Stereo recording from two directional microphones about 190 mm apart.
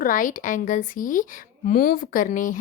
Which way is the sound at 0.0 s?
45° left (ahead or behind).